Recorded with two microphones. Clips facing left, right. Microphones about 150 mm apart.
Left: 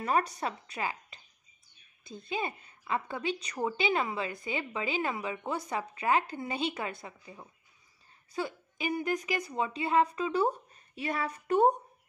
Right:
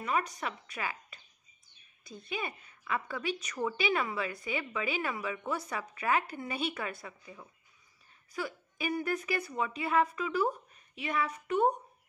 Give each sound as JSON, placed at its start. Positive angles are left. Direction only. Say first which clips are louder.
{"t": 0.0, "sound": "a woman's voice", "louder": "left 3 dB", "side_deg": 35}
{"t": 9.5, "sound": "a woman's voice", "louder": "left 3 dB", "side_deg": 30}